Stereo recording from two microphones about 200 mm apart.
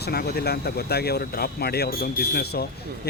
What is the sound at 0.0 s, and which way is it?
Speech, 55° left (ahead or behind).